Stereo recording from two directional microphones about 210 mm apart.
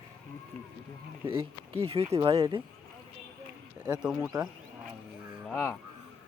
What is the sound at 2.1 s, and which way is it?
Speech, 25° right (ahead or behind).